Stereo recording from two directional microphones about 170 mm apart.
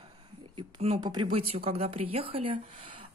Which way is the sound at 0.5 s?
35° right (ahead or behind).